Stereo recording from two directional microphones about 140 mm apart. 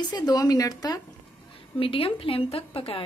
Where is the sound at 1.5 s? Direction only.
40° left (ahead or behind).